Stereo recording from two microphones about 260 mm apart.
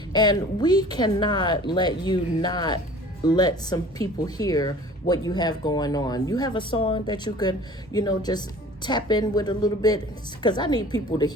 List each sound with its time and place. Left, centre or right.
0.1 s speech: centre